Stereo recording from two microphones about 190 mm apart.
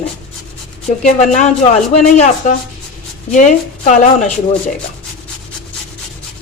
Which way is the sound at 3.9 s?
40° left (ahead or behind).